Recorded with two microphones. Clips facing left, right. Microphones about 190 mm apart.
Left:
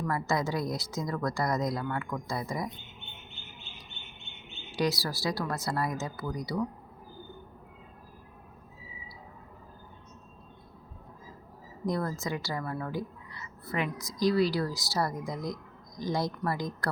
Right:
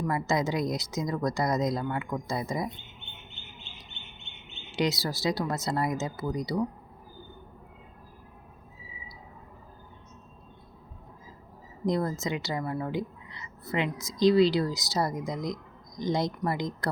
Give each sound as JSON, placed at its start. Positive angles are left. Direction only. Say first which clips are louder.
{"t": 0.0, "sound": "a woman's voice", "louder": "right 2 dB", "side_deg": -20}
{"t": 4.7, "sound": "a woman's voice", "louder": "right 1 dB", "side_deg": -20}
{"t": 11.9, "sound": "a woman's voice", "louder": "right 3 dB", "side_deg": -20}